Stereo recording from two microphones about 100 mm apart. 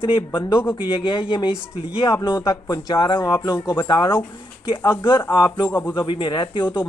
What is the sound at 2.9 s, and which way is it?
Speech, 55° left (ahead or behind).